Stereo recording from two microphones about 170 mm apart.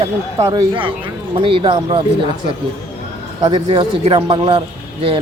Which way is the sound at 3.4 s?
30° right (ahead or behind).